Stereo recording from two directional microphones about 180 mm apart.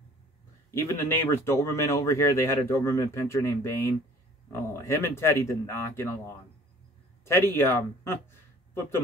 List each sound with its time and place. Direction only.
0.7 s speech: 15° left (ahead or behind)